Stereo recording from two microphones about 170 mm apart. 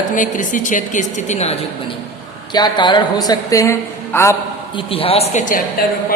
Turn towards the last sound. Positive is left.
turn(degrees=55)  # may be behind; listen again after turning